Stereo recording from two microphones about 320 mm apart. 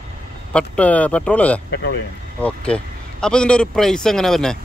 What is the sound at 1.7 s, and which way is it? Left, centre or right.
Speech, left.